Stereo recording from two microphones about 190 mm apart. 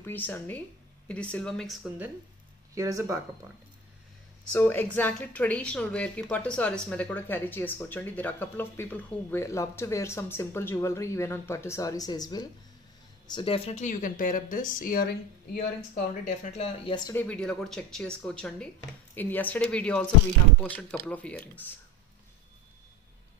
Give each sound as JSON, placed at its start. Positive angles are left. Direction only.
{"t": 0.0, "sound": "speech", "side_deg": 10}
{"t": 2.7, "sound": "speech", "side_deg": -15}
{"t": 4.5, "sound": "a woman's voice", "side_deg": 10}
{"t": 16.3, "sound": "speech", "side_deg": 35}
{"t": 17.1, "sound": "a woman's voice", "side_deg": 10}